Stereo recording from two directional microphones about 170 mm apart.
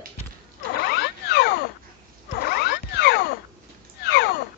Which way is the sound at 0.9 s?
75° left (ahead or behind).